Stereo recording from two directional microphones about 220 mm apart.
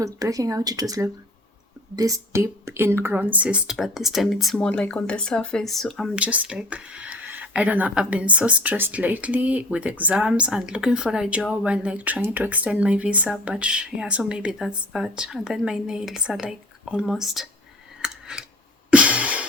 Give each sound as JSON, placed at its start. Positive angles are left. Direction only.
{"t": 0.0, "sound": "speech", "side_deg": -15}
{"t": 18.0, "sound": "scissors", "side_deg": -5}
{"t": 18.9, "sound": "a sound", "side_deg": -5}